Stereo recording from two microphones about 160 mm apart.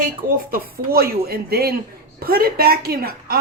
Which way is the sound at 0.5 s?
70° right (ahead or behind).